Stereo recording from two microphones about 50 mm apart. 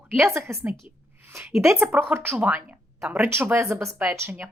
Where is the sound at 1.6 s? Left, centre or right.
Right.